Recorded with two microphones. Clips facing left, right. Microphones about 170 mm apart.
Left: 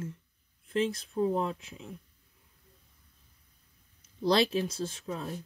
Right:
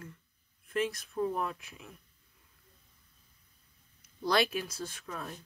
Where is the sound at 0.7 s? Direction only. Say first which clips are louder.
Left 3 dB; 30° left (ahead or behind).